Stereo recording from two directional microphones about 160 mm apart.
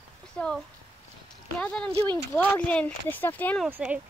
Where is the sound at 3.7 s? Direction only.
10° right (ahead or behind).